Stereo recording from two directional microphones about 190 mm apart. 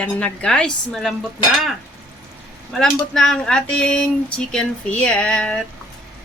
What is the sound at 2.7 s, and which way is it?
A woman's voice, 5° left (ahead or behind).